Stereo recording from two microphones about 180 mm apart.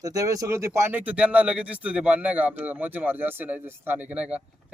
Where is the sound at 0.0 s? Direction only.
20° right (ahead or behind).